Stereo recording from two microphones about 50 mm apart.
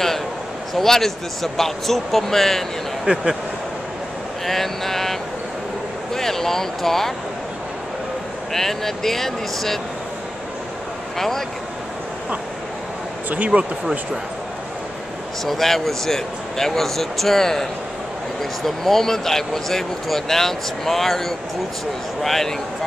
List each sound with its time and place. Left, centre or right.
0.7 s speech: centre
4.5 s vehicle: centre
6.1 s a sound: centre
8.5 s speech: centre
11.1 s speech: centre
13.3 s speech: right
15.4 s speech: centre